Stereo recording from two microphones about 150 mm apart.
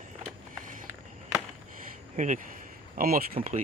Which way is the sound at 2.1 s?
55° right (ahead or behind).